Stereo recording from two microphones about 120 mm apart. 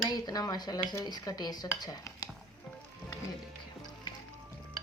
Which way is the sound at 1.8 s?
30° left (ahead or behind).